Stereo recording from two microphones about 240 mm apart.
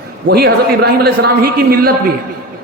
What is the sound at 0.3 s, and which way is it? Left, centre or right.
A man's voice, right.